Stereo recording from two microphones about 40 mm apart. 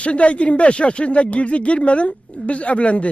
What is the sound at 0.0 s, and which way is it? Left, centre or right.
Speech, left.